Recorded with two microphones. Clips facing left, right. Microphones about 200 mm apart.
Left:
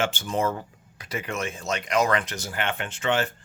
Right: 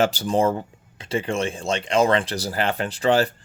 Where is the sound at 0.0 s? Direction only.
40° right (ahead or behind).